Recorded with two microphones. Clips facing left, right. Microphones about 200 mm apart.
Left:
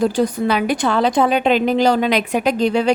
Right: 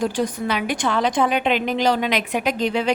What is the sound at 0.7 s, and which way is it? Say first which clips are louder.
A woman's voice: left 4 dB; 35° left (ahead or behind).